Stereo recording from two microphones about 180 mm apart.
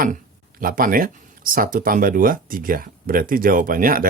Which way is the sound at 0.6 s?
50° right (ahead or behind).